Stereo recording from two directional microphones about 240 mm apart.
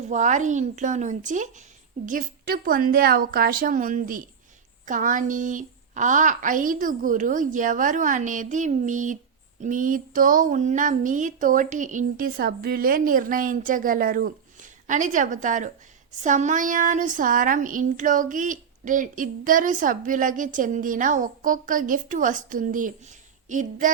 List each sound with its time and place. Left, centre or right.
0.1 s speech: right